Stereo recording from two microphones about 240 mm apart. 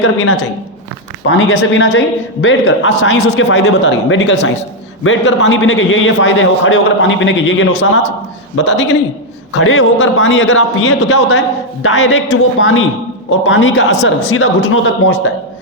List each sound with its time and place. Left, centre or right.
0.0 s a man's voice: left